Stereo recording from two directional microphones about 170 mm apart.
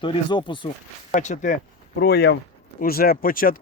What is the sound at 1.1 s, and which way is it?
Speech, 45° left (ahead or behind).